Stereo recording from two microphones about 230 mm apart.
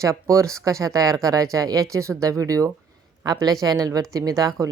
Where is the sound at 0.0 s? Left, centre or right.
Centre.